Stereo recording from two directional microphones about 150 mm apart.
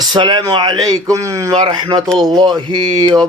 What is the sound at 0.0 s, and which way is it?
Speech, 30° right (ahead or behind).